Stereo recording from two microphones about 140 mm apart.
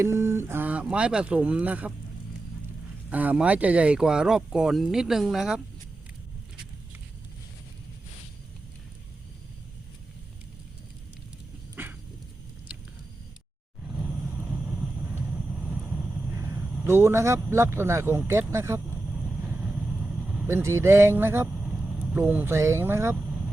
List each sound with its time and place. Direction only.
0.0 s speech: 20° right (ahead or behind)
3.1 s speech: 10° right (ahead or behind)
11.8 s dog: 15° right (ahead or behind)
13.8 s vehicle: 5° right (ahead or behind)
14.2 s vehicle: 15° right (ahead or behind)
16.4 s a sound: 15° right (ahead or behind)
16.8 s speech: 15° right (ahead or behind)
18.9 s vehicle: 5° right (ahead or behind)
20.5 s speech: 20° right (ahead or behind)
21.6 s vehicle: 5° right (ahead or behind)
22.1 s speech: 15° right (ahead or behind)
23.2 s vehicle: 5° right (ahead or behind)